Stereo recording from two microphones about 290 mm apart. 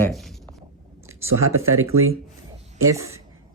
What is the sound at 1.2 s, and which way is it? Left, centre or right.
Speech, right.